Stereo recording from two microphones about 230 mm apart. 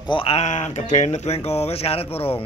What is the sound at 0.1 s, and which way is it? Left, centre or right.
Speech, left.